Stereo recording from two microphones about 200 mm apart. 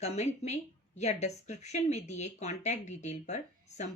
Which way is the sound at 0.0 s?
35° left (ahead or behind).